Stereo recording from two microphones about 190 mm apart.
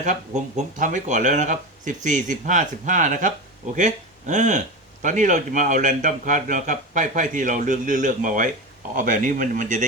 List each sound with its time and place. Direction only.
0.0 s a man's voice: 40° right (ahead or behind)